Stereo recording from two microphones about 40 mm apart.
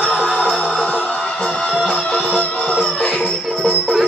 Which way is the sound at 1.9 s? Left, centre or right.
Left.